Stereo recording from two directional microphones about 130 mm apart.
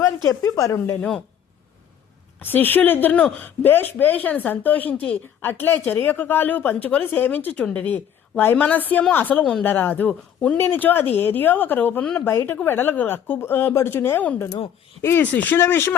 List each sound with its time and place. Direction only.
0.0 s speech: 25° left (ahead or behind)
2.4 s speech: 15° left (ahead or behind)